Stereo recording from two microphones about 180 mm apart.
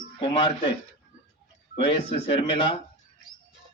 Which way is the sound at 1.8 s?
35° left (ahead or behind).